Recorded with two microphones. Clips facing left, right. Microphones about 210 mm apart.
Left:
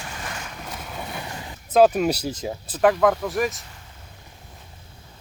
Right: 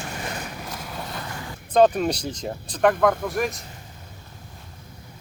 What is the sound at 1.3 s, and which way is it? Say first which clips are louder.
Boat: right 1 dB; 20° left (ahead or behind).